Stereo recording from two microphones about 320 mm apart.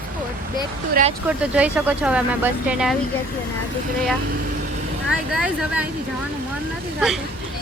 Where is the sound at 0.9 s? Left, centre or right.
Right.